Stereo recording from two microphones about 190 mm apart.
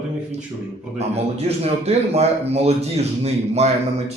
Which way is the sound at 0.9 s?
35° right (ahead or behind).